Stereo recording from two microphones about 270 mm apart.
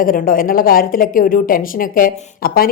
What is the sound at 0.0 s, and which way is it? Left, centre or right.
A woman's voice, left.